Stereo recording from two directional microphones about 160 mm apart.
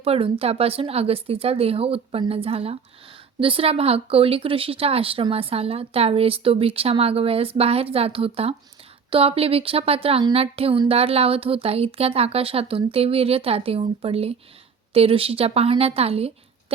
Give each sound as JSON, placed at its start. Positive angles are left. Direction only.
{"t": 0.0, "sound": "speech", "side_deg": -35}